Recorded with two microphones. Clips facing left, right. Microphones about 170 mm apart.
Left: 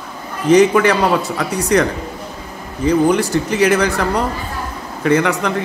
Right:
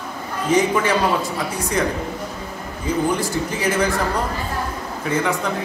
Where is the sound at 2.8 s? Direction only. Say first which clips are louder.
Left 7 dB; 75° left (ahead or behind).